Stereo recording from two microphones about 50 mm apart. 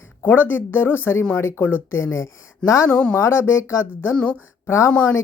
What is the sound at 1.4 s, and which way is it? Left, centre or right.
Speech, left.